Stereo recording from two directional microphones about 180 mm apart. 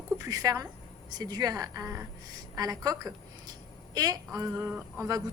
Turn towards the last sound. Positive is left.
turn(degrees=-20)  # may be behind; listen again after turning